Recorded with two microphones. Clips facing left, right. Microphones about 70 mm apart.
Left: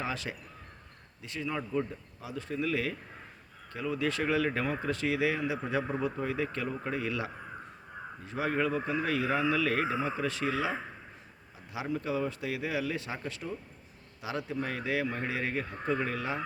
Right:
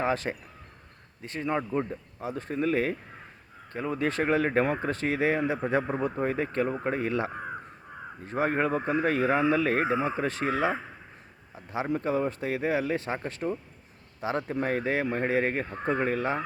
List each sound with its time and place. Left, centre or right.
0.0 s speech: right